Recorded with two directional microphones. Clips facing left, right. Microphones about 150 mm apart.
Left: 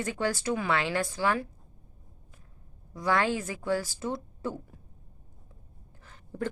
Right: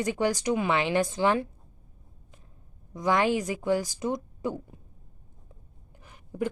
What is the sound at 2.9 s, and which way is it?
Speech, 20° right (ahead or behind).